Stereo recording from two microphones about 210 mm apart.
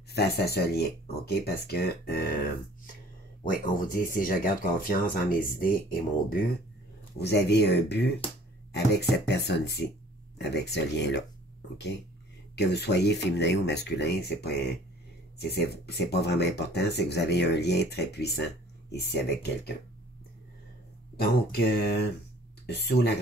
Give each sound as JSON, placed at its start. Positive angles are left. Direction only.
{"t": 0.1, "sound": "speech", "side_deg": 50}
{"t": 3.7, "sound": "speech", "side_deg": 40}
{"t": 12.5, "sound": "speech", "side_deg": 55}
{"t": 21.2, "sound": "speech", "side_deg": 50}